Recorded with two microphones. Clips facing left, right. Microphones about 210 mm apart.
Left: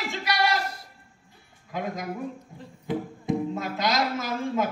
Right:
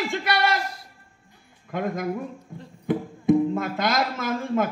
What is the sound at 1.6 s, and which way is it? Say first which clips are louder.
Speech: right 5 dB; 55° right (ahead or behind).